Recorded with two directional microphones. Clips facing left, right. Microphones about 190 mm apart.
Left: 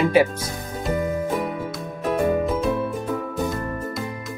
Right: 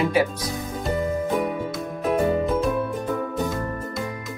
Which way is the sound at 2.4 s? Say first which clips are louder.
Even; centre (ahead or behind).